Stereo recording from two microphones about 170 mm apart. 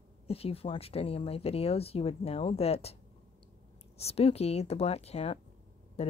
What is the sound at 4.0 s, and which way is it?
Speech, 35° left (ahead or behind).